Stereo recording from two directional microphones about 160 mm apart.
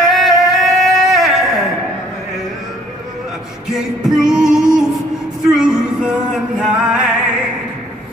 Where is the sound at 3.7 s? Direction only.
Centre (ahead or behind).